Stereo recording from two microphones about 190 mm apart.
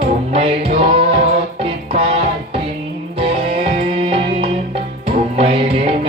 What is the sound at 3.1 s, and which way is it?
Music, 30° right (ahead or behind).